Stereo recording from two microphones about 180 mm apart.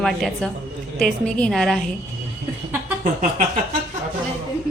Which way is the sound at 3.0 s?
45° right (ahead or behind).